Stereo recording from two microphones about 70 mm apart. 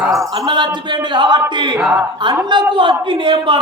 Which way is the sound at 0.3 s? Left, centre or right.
Right.